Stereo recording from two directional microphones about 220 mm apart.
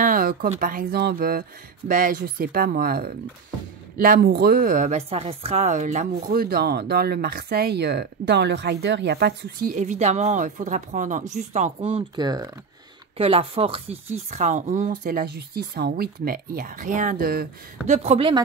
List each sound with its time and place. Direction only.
0.0 s a woman's voice: 40° right (ahead or behind)
17.8 s speech: 30° right (ahead or behind)